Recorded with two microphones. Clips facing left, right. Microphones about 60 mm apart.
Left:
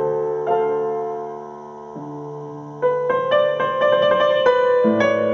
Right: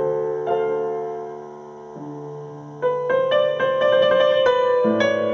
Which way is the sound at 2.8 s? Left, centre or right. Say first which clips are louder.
Left 1 dB; centre.